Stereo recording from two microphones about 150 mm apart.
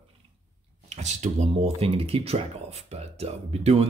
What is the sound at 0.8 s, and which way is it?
Speech, 50° right (ahead or behind).